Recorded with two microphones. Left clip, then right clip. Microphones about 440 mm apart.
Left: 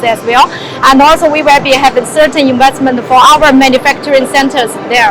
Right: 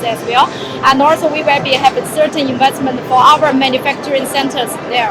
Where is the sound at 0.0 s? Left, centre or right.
Left.